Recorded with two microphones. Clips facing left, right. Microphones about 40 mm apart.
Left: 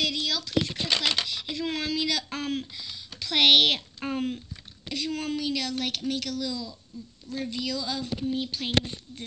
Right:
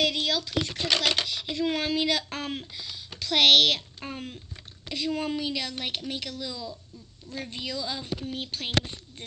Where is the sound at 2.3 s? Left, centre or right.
Centre.